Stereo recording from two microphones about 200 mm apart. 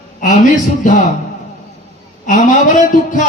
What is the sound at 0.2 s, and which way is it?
Speech, 40° left (ahead or behind).